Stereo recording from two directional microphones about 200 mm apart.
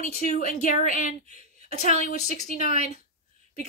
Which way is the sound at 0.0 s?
40° left (ahead or behind).